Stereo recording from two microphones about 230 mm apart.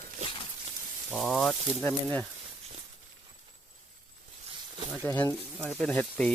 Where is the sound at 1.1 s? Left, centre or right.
Centre.